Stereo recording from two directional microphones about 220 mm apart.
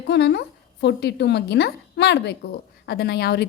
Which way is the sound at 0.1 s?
50° left (ahead or behind).